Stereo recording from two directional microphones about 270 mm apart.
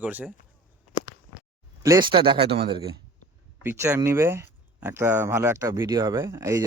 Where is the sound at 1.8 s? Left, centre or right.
Centre.